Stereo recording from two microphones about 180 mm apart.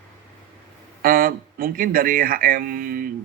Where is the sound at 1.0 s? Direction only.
50° right (ahead or behind).